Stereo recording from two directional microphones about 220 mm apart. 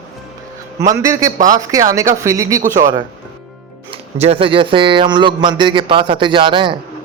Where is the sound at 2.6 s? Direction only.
35° right (ahead or behind).